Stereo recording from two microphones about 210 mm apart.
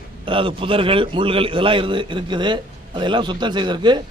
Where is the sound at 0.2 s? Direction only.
25° right (ahead or behind).